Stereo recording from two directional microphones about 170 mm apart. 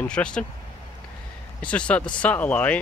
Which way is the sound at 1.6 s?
5° left (ahead or behind).